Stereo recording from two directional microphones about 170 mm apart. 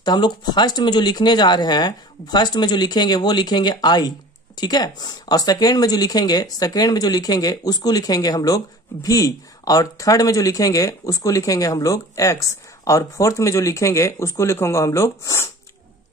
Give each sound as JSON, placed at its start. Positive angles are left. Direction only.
{"t": 0.0, "sound": "speech", "side_deg": 25}